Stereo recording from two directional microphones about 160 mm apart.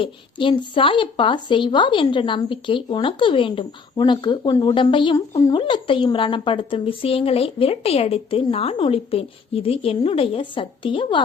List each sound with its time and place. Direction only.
0.0 s a woman's voice: 30° left (ahead or behind)